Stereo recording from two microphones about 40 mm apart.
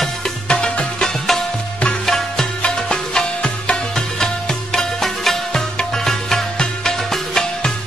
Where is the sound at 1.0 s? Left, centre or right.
Centre.